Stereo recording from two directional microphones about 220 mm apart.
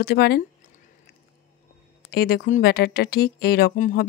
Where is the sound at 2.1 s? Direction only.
45° left (ahead or behind).